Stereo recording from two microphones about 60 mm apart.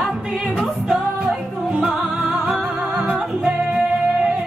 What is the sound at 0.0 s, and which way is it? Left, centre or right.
Music, centre.